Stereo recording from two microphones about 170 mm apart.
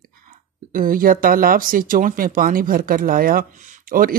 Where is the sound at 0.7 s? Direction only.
55° right (ahead or behind).